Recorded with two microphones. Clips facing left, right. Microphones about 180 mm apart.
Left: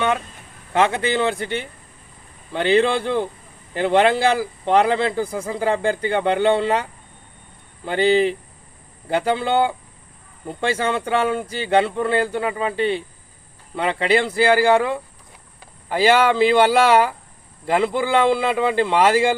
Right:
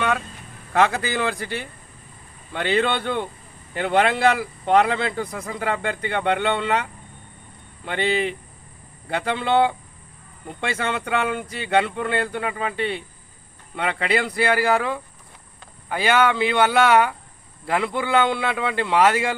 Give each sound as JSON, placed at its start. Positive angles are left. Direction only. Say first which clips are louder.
{"t": 0.7, "sound": "speech", "louder": "left 2 dB", "side_deg": 25}
{"t": 7.9, "sound": "speech", "louder": "left 6 dB", "side_deg": 30}